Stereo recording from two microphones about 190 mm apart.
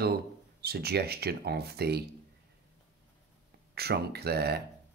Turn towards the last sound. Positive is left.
turn(degrees=-60)  # may be behind; listen again after turning